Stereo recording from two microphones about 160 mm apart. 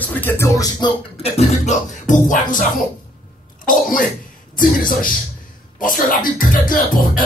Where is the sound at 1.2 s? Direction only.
45° left (ahead or behind).